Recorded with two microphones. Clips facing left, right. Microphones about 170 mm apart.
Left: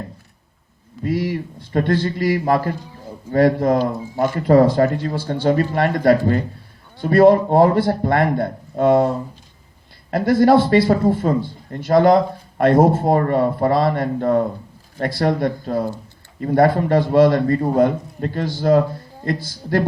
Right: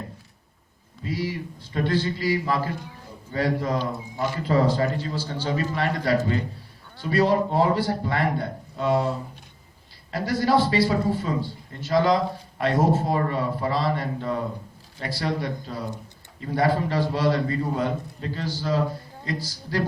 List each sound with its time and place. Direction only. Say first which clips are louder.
1.0 s a man's voice: left 7 dB; 55° left (ahead or behind)